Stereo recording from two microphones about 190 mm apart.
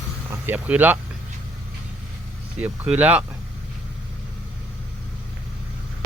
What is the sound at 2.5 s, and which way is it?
Speech, 10° right (ahead or behind).